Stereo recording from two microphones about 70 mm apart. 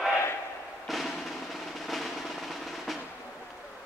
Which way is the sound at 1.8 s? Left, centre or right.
Centre.